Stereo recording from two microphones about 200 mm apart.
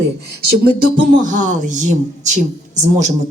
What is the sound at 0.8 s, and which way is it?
Speech, 40° right (ahead or behind).